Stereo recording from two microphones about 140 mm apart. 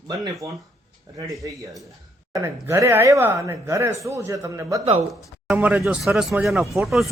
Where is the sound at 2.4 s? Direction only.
15° right (ahead or behind).